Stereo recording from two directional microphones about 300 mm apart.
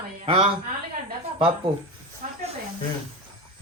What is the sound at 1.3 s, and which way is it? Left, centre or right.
Speech, centre.